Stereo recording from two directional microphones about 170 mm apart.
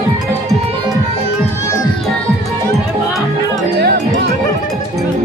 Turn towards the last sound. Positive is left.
turn(degrees=-75)  # may be behind; listen again after turning